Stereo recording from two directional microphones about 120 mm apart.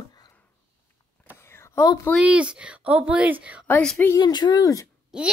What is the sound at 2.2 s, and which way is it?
Speech, 10° right (ahead or behind).